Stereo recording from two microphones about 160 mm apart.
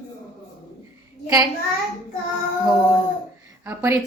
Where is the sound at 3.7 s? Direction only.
15° right (ahead or behind).